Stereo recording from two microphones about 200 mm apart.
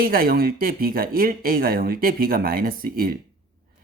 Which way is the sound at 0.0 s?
45° right (ahead or behind).